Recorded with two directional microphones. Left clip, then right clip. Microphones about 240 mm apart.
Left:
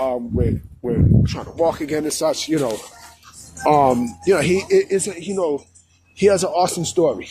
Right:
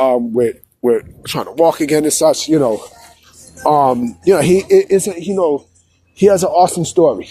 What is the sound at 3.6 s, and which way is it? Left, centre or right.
Speech, right.